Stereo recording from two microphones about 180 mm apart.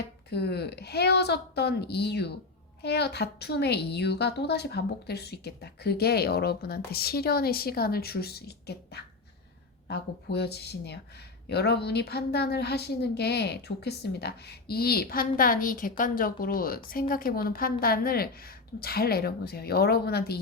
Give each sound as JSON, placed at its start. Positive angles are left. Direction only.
{"t": 0.0, "sound": "a woman's voice", "side_deg": 65}